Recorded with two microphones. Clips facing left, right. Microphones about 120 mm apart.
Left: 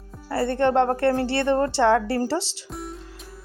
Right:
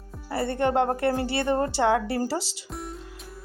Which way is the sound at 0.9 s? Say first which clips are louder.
Left 3 dB; 55° left (ahead or behind).